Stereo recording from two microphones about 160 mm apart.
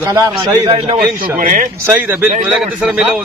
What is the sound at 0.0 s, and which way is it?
Speech, 20° right (ahead or behind).